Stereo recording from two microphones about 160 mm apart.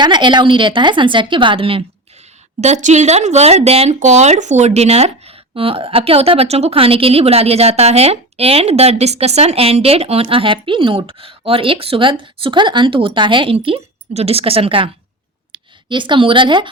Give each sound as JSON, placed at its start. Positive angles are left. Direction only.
{"t": 0.0, "sound": "speech", "side_deg": -30}
{"t": 2.6, "sound": "a woman's voice", "side_deg": -45}